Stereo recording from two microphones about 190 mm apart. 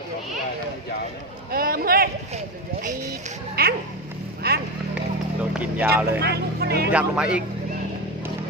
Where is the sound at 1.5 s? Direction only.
50° right (ahead or behind).